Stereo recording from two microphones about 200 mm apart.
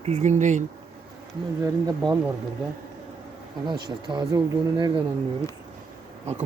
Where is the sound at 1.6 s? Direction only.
20° right (ahead or behind).